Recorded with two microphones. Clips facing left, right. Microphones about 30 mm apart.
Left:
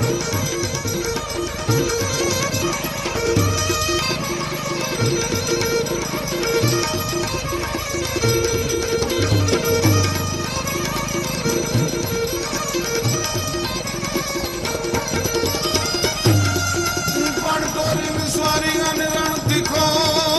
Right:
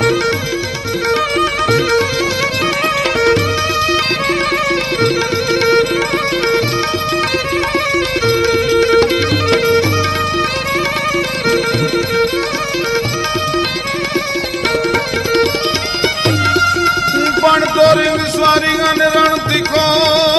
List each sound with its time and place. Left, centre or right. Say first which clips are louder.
1.4 s music: right 8 dB; right
5.0 s music: right 6 dB; right
8.3 s music: right 8 dB; right
9.5 s music: right 7 dB; right
14.9 s music: right 8 dB; right